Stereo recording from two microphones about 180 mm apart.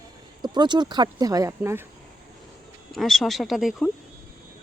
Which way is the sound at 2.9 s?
Centre (ahead or behind).